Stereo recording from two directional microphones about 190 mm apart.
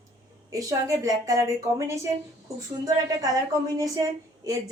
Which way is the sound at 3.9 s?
20° right (ahead or behind).